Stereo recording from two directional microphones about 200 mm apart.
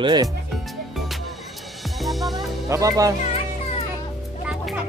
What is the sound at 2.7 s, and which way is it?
Speech, 15° right (ahead or behind).